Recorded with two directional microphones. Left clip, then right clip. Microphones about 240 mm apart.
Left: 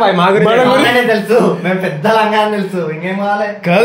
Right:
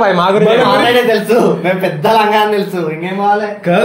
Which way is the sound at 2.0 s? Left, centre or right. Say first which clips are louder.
Right 1 dB; right.